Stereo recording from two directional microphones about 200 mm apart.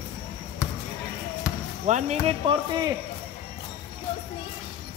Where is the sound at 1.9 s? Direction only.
35° right (ahead or behind).